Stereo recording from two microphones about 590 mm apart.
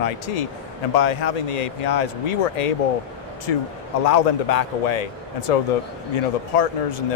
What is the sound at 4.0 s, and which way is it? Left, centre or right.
Speech, left.